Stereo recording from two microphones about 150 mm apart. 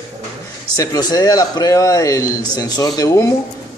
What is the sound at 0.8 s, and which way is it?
Speech, 25° left (ahead or behind).